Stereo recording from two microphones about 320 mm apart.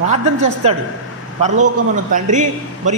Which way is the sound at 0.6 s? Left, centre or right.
Centre.